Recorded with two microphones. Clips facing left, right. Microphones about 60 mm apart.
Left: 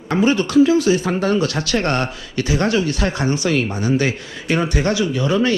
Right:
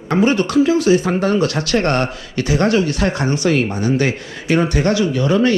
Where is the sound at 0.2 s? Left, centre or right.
Right.